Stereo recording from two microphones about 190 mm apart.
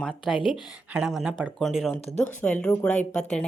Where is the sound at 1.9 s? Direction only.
35° left (ahead or behind).